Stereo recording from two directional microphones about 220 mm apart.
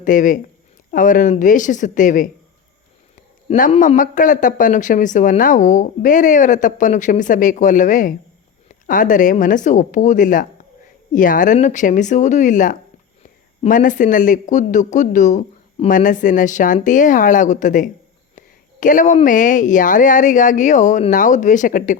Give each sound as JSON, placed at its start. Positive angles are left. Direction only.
{"t": 0.0, "sound": "a man's voice", "side_deg": 35}
{"t": 3.5, "sound": "a man's voice", "side_deg": 35}